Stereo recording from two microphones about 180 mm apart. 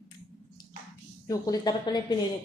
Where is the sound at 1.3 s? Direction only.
20° left (ahead or behind).